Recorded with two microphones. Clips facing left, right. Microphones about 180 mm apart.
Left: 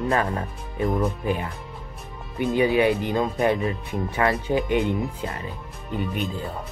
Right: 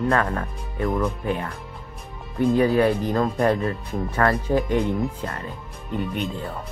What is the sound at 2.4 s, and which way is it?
Speech, centre (ahead or behind).